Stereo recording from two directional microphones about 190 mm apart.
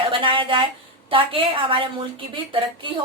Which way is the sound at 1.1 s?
25° right (ahead or behind).